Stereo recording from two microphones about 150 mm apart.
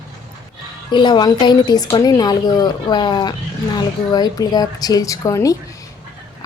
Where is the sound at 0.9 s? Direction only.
30° left (ahead or behind).